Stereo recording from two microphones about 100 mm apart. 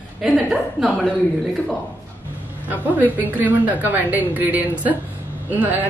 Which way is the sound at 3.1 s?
15° right (ahead or behind).